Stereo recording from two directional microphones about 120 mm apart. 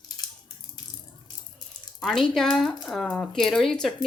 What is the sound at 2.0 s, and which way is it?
Speech, 5° left (ahead or behind).